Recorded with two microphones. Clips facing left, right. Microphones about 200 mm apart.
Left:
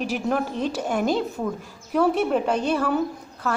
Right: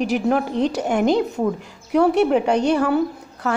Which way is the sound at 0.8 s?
65° right (ahead or behind).